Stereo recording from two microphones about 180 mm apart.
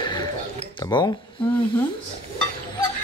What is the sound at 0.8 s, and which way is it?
Speech, 25° left (ahead or behind).